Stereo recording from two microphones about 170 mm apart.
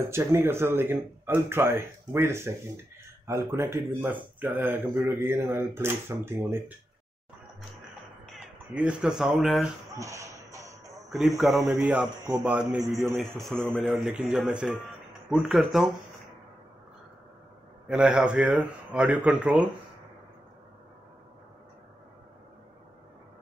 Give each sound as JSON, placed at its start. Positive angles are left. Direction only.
{"t": 0.1, "sound": "speech", "side_deg": -15}
{"t": 8.3, "sound": "speech", "side_deg": -5}
{"t": 9.9, "sound": "shuffle", "side_deg": -20}
{"t": 11.1, "sound": "speech", "side_deg": 0}
{"t": 17.8, "sound": "speech", "side_deg": -5}